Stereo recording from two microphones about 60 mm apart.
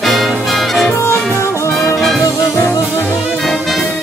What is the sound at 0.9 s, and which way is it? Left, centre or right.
Music, left.